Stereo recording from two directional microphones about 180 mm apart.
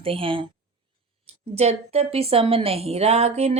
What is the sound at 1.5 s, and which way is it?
A woman's voice, 35° right (ahead or behind).